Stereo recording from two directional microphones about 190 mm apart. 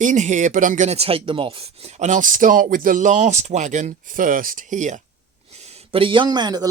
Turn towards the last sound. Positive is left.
turn(degrees=-20)  # may be behind; listen again after turning